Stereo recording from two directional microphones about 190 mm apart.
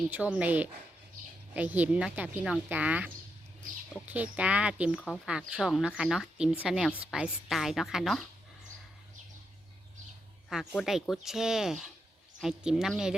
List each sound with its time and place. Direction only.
0.1 s speech: 5° right (ahead or behind)
4.1 s speech: 5° right (ahead or behind)
4.9 s speech: 5° left (ahead or behind)
5.3 s a woman's voice: 5° right (ahead or behind)
10.5 s a woman's voice: centre (ahead or behind)